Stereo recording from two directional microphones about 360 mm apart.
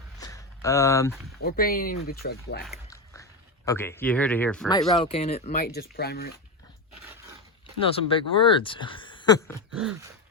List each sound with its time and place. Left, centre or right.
0.2 s a sound: centre
1.4 s speech: left
2.6 s a sound: centre
3.7 s speech: centre
4.9 s speech: centre
7.8 s speech: centre
9.7 s speech: centre